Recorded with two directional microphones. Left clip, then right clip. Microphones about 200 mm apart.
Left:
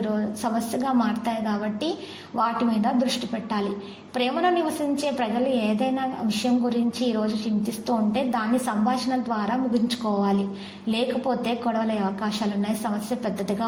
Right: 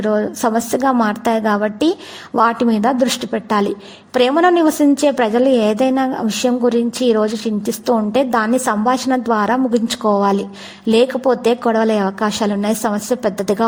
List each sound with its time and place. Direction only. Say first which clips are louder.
0.0 s a woman's voice: right 11 dB; 50° right (ahead or behind)